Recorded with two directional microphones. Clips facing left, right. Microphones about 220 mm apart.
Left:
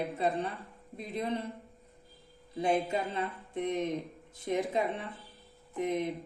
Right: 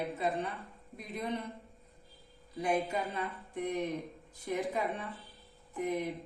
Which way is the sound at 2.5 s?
25° left (ahead or behind).